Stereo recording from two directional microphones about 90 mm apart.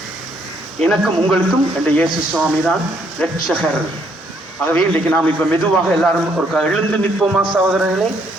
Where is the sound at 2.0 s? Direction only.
Centre (ahead or behind).